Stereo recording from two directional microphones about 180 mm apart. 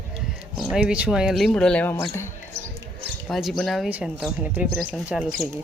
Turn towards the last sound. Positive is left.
turn(degrees=-5)  # may be behind; listen again after turning